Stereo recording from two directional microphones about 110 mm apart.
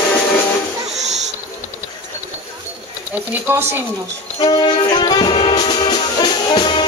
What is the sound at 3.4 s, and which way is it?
Speech, 20° right (ahead or behind).